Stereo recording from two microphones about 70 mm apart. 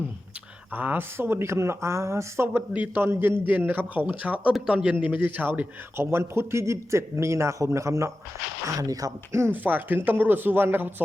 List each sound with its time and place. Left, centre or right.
0.7 s speech: right
1.1 s speech: right
6.0 s a man's voice: right
9.5 s speech: right